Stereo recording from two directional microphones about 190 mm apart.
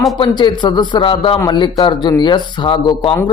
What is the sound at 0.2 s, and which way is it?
Speech, 25° left (ahead or behind).